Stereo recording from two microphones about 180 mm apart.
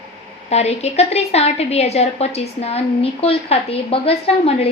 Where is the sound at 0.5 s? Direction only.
35° left (ahead or behind).